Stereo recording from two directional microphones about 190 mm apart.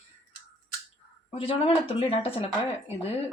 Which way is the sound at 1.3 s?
30° left (ahead or behind).